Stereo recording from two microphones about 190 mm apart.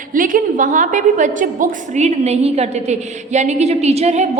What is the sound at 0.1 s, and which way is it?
A woman's voice, 45° right (ahead or behind).